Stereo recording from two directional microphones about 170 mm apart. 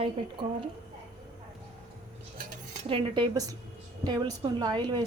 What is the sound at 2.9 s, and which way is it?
A woman's voice, 25° right (ahead or behind).